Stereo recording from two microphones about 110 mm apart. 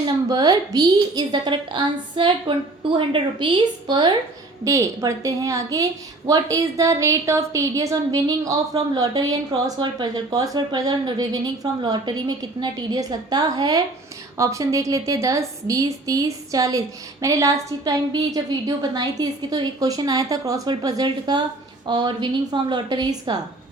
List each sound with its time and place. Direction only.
0.3 s a woman's voice: 35° right (ahead or behind)
4.6 s a woman's voice: 30° right (ahead or behind)